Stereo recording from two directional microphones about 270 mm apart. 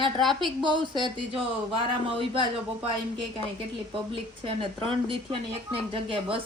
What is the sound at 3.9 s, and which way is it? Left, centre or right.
Speech, centre.